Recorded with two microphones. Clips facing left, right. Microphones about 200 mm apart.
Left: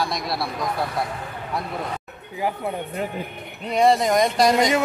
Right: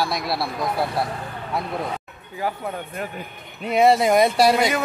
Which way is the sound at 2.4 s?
20° left (ahead or behind).